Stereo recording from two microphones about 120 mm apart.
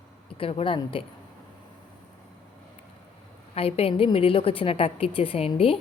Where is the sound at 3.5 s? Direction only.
55° left (ahead or behind).